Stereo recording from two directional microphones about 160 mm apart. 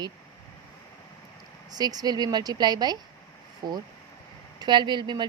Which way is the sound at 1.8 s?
25° right (ahead or behind).